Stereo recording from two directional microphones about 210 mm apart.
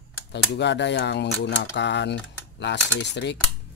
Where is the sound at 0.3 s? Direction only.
55° left (ahead or behind).